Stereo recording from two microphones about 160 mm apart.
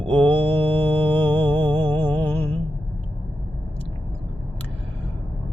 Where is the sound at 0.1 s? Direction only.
10° left (ahead or behind).